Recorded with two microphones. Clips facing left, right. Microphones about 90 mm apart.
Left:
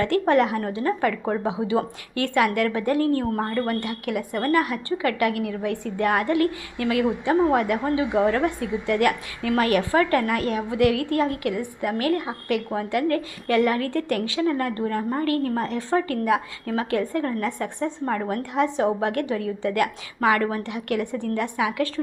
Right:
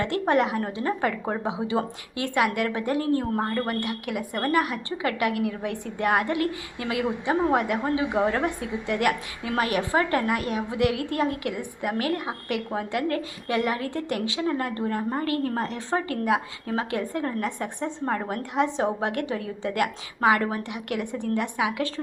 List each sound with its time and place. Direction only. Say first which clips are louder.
0.0 s a woman's voice: left 3 dB; 20° right (ahead or behind)